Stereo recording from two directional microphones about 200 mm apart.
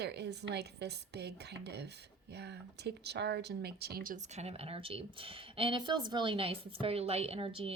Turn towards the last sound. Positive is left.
turn(degrees=-25)  # may be behind; listen again after turning